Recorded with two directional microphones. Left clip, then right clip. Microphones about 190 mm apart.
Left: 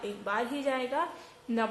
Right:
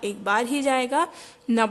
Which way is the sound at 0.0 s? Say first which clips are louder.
Right 8 dB; 55° right (ahead or behind).